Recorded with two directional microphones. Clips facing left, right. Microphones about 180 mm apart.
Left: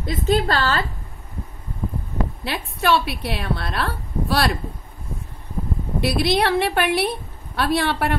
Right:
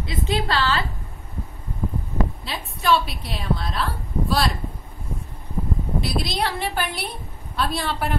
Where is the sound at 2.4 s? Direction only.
65° left (ahead or behind).